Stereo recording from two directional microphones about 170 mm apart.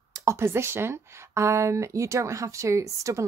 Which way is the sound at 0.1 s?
20° right (ahead or behind).